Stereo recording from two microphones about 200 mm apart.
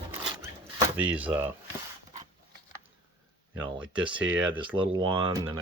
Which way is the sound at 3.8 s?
5° right (ahead or behind).